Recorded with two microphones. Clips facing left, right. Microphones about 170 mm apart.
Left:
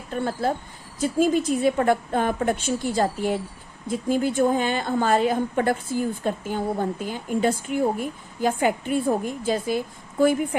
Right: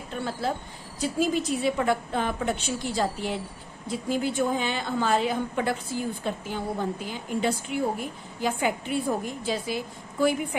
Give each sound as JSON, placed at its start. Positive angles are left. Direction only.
{"t": 0.1, "sound": "a woman's voice", "side_deg": 50}